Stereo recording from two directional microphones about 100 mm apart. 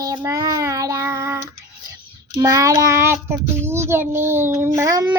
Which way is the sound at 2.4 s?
35° right (ahead or behind).